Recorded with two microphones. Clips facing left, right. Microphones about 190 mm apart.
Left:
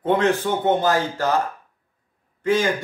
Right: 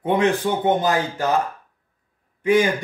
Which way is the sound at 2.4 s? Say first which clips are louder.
Right 3 dB; 15° right (ahead or behind).